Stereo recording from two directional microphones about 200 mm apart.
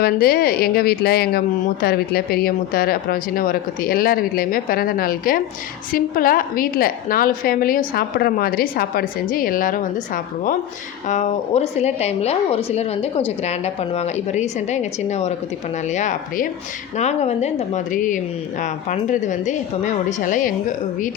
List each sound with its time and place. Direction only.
0.0 s a woman's voice: 50° left (ahead or behind)
11.1 s a woman's voice: 35° left (ahead or behind)